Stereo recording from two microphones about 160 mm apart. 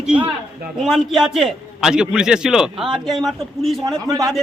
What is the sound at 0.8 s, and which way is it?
A man's voice, 5° right (ahead or behind).